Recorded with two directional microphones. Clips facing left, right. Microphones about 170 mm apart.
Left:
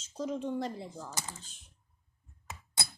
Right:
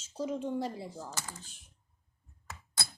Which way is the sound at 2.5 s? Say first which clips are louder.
Left 1 dB; 20° left (ahead or behind).